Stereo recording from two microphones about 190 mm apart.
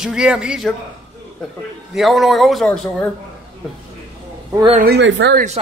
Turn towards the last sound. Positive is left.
turn(degrees=-65)  # may be behind; listen again after turning